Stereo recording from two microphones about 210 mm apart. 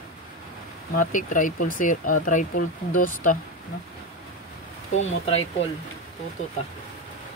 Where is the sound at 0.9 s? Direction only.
40° left (ahead or behind).